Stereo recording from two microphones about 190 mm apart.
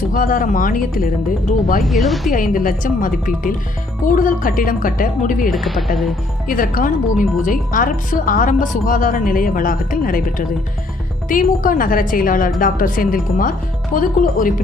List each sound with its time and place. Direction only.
0.1 s speech: 45° left (ahead or behind)
1.8 s speech: centre (ahead or behind)
2.3 s speech: 45° left (ahead or behind)
5.5 s speech: centre (ahead or behind)
6.5 s speech: 45° left (ahead or behind)